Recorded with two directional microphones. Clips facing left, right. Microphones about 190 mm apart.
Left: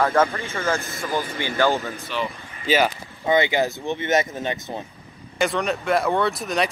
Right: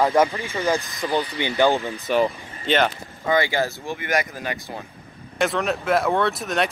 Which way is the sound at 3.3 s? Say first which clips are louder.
Left 2 dB; 20° left (ahead or behind).